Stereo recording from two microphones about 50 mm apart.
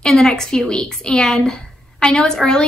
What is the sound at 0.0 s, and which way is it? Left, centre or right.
A woman's voice, centre.